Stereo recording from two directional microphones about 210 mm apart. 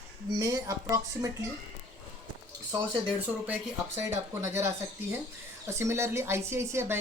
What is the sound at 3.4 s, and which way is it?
A woman's voice, 10° right (ahead or behind).